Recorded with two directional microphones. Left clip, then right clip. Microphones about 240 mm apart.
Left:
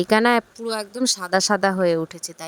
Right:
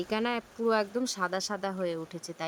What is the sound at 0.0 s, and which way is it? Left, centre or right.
Speech, left.